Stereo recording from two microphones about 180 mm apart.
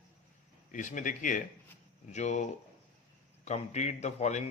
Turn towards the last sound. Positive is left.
turn(degrees=40)  # may be behind; listen again after turning